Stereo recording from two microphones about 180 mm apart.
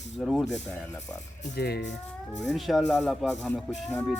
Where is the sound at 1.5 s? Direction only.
60° left (ahead or behind).